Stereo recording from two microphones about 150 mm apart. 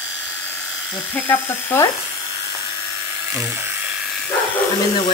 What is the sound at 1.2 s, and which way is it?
Speech, 15° left (ahead or behind).